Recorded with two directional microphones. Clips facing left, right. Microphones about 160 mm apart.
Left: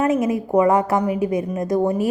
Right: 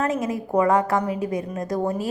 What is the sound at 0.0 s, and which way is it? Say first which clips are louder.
A woman's voice: left 5 dB; 20° left (ahead or behind).